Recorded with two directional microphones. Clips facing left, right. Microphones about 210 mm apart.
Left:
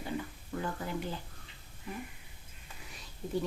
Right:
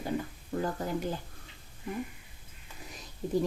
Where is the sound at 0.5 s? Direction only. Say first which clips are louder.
Right 5 dB; 35° right (ahead or behind).